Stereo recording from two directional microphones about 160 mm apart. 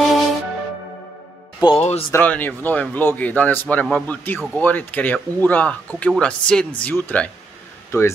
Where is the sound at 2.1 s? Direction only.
10° left (ahead or behind).